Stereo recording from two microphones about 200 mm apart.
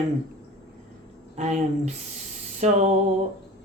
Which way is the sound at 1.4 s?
35° right (ahead or behind).